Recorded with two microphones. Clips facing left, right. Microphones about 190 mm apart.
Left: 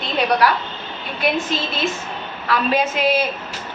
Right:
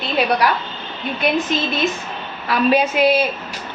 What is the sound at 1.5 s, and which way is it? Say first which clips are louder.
A woman's voice: right 3 dB; 20° right (ahead or behind).